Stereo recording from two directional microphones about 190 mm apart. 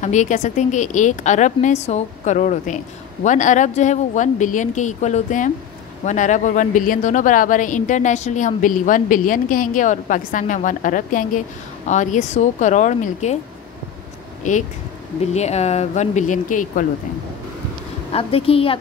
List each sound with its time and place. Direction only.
0.0 s a woman's voice: 40° left (ahead or behind)
15.1 s a woman's voice: 35° left (ahead or behind)
18.1 s a woman's voice: 30° left (ahead or behind)